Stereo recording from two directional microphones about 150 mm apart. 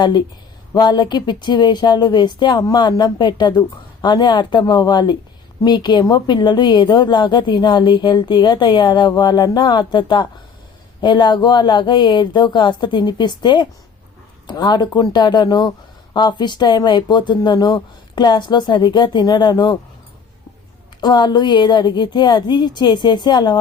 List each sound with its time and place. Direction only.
0.0 s speech: 30° left (ahead or behind)
21.0 s speech: 30° left (ahead or behind)